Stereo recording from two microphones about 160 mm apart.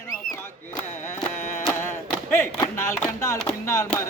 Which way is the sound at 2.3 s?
15° left (ahead or behind).